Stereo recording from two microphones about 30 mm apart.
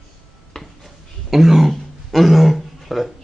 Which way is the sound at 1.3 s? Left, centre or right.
Centre.